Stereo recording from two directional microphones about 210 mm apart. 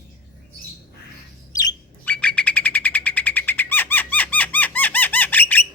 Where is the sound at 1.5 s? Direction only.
20° left (ahead or behind).